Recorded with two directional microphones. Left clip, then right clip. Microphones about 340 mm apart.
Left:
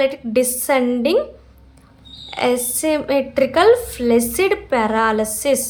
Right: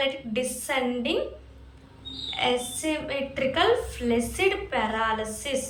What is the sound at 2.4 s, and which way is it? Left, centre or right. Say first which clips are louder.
A woman's voice: left 8 dB; centre.